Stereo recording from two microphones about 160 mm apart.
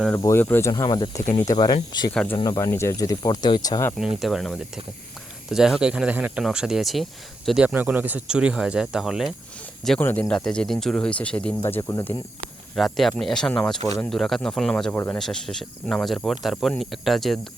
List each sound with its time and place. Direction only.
0.2 s speech: 15° left (ahead or behind)
0.7 s speech: 25° left (ahead or behind)
2.1 s speech: 10° left (ahead or behind)
4.2 s speech: centre (ahead or behind)
10.0 s speech: 10° left (ahead or behind)
12.7 s speech: centre (ahead or behind)
13.8 s speech: 20° left (ahead or behind)
14.1 s speech: centre (ahead or behind)
14.9 s speech: 15° left (ahead or behind)
15.2 s speech: centre (ahead or behind)